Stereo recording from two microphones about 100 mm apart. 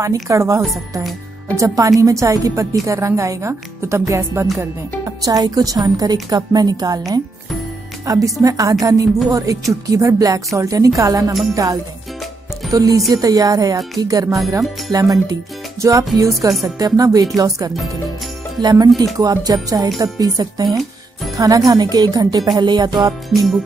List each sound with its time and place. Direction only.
0.0 s a woman's voice: 30° right (ahead or behind)
4.1 s music: 30° right (ahead or behind)
4.6 s a woman's voice: 35° right (ahead or behind)
8.0 s a woman's voice: 35° right (ahead or behind)
23.3 s music: centre (ahead or behind)